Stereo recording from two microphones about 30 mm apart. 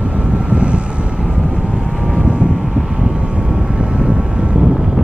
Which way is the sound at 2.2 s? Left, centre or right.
Right.